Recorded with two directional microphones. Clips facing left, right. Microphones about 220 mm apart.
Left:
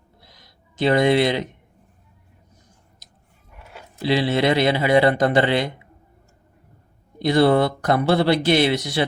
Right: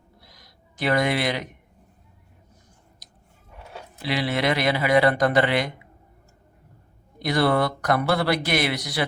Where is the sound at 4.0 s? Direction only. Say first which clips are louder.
Left 5 dB; 25° left (ahead or behind).